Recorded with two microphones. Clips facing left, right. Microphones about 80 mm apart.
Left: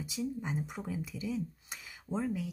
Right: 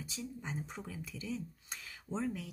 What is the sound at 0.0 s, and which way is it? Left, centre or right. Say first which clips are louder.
Speech: left 7 dB; centre.